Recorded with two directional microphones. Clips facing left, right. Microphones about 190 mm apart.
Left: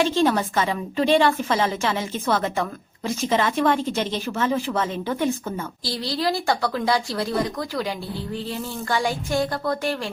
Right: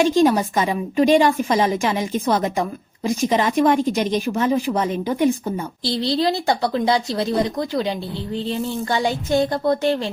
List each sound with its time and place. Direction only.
0.0 s a woman's voice: 15° right (ahead or behind)